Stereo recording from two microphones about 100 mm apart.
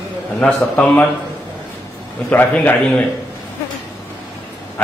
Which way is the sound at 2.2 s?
15° left (ahead or behind).